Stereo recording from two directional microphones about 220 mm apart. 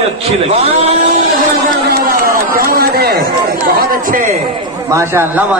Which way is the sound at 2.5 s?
45° right (ahead or behind).